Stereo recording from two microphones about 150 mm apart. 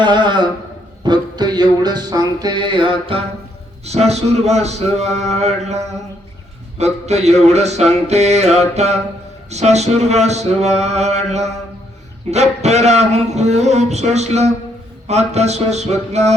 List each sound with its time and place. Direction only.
0.0 s speech: 30° right (ahead or behind)
1.0 s a sound: 30° right (ahead or behind)
3.8 s speech: 45° right (ahead or behind)